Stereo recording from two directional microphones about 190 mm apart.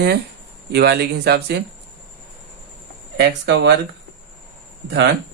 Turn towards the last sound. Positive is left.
turn(degrees=-65)  # may be behind; listen again after turning